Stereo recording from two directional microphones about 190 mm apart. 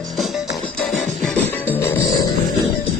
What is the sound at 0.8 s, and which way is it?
Music, 5° left (ahead or behind).